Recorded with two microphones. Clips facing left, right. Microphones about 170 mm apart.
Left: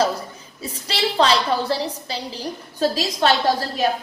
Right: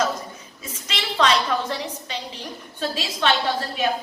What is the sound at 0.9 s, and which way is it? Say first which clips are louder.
A woman's voice: left 3 dB; 30° left (ahead or behind).